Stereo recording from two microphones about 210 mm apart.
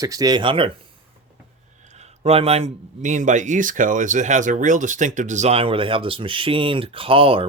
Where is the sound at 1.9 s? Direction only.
30° right (ahead or behind).